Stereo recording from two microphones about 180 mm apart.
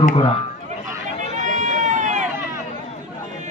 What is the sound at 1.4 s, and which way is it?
Run, 45° right (ahead or behind).